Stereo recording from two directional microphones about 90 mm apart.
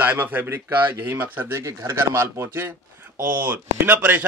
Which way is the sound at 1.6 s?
35° right (ahead or behind).